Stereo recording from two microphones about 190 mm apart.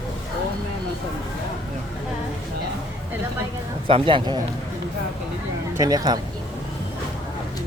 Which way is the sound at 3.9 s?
30° right (ahead or behind).